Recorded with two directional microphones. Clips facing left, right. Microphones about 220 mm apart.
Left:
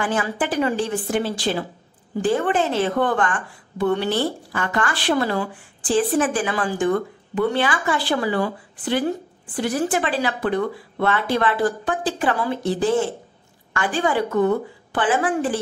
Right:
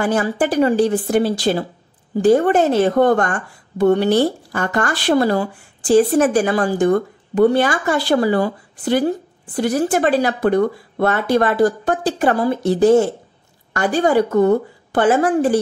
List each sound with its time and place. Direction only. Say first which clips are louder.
0.0 s a woman's voice: right 5 dB; 40° right (ahead or behind)